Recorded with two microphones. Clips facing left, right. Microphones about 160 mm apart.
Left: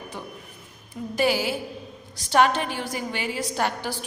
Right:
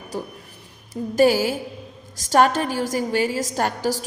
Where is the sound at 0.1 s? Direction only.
35° right (ahead or behind).